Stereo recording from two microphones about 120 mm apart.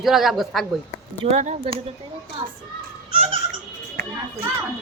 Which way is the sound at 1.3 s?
70° right (ahead or behind).